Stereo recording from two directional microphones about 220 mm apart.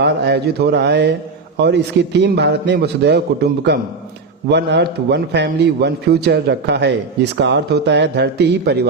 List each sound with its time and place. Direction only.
0.0 s a man's voice: 50° right (ahead or behind)